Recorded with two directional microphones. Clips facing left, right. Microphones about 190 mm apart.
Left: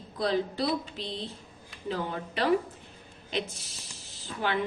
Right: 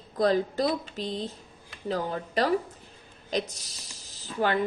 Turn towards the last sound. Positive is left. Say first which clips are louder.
# right 4 dB
turn(degrees=-40)  # may be behind; listen again after turning